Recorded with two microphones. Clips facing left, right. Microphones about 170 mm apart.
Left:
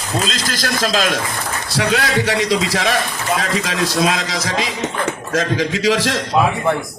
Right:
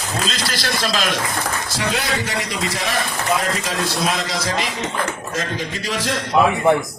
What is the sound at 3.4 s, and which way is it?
Music, 90° left.